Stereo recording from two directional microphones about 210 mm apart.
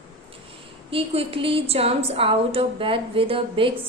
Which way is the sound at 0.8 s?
25° right (ahead or behind).